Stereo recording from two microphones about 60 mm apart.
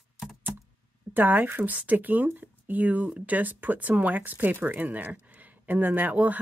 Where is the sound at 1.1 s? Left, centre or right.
Right.